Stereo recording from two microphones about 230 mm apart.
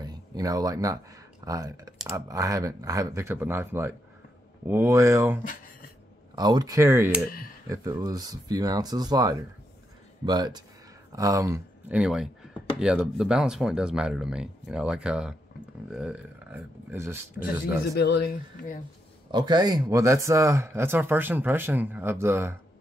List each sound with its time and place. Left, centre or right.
0.0 s a sound: centre
1.4 s speech: centre
5.4 s speech: left
6.3 s speech: centre
17.8 s speech: left
19.3 s speech: centre